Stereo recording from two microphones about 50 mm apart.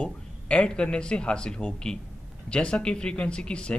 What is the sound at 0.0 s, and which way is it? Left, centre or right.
A man's voice, left.